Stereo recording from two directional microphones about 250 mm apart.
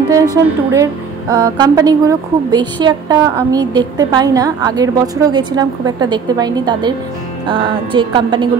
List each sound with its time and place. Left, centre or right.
0.1 s a woman's voice: centre
7.4 s music: centre